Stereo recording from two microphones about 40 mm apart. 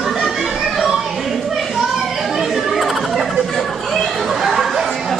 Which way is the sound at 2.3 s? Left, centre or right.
Centre.